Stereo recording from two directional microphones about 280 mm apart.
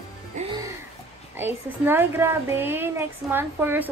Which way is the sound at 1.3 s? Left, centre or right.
Centre.